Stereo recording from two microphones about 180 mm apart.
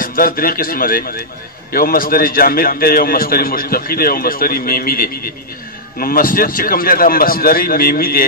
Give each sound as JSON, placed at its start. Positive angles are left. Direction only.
{"t": 0.0, "sound": "a man's voice", "side_deg": 55}